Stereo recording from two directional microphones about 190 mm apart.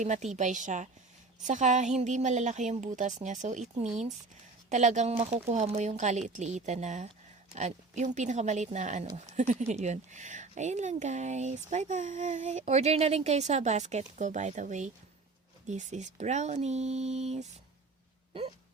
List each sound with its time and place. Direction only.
0.0 s speech: 35° right (ahead or behind)